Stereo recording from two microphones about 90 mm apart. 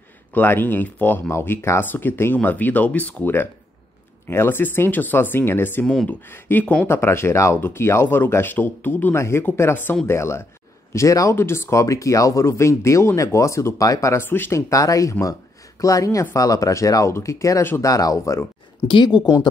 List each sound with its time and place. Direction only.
0.3 s speech: 20° left (ahead or behind); by 14.2 s 40° left (ahead or behind)
14.2 s speech: 25° left (ahead or behind)
14.7 s speech: 40° left (ahead or behind)
19.0 s speech: 50° left (ahead or behind)